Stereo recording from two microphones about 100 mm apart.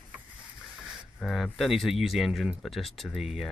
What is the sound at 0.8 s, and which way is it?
Speech, centre (ahead or behind).